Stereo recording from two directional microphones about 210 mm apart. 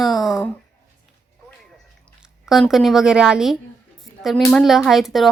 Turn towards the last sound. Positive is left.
turn(degrees=0)  # may be behind; listen again after turning